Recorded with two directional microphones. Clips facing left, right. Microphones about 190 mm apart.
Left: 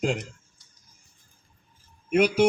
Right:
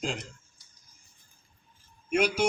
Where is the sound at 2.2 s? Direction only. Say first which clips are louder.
Left 5 dB; 55° left (ahead or behind).